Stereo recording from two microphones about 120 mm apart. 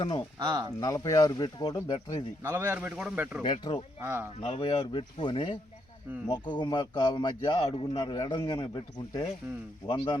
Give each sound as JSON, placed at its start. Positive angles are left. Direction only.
{"t": 0.0, "sound": "speech", "side_deg": 45}
{"t": 0.3, "sound": "speech", "side_deg": -35}
{"t": 0.8, "sound": "speech", "side_deg": 30}
{"t": 2.4, "sound": "speech", "side_deg": -15}
{"t": 3.4, "sound": "speech", "side_deg": 45}
{"t": 4.0, "sound": "speech", "side_deg": -20}
{"t": 4.4, "sound": "speech", "side_deg": 55}